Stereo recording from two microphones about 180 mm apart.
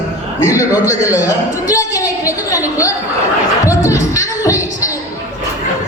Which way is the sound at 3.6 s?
20° left (ahead or behind).